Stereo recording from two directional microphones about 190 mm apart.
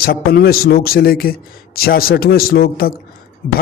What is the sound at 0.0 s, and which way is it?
A man's voice, 50° left (ahead or behind).